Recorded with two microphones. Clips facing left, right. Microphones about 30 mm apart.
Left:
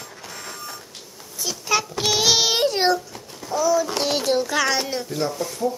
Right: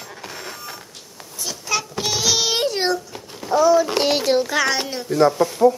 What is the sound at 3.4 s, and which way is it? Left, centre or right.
A child's voice, right.